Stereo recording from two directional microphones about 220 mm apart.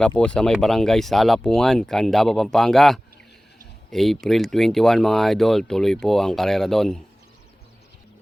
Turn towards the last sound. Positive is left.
turn(degrees=0)  # may be behind; listen again after turning